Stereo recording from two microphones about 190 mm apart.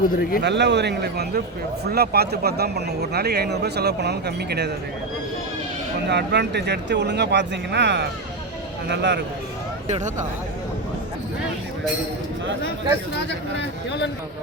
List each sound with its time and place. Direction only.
0.1 s speech: 50° left (ahead or behind)
0.4 s speech: 65° right (ahead or behind)
6.1 s speech: 65° right (ahead or behind)
9.9 s speech: 40° right (ahead or behind)
13.1 s speech: 65° left (ahead or behind)